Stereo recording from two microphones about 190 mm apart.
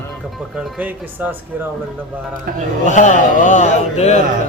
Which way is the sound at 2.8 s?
40° left (ahead or behind).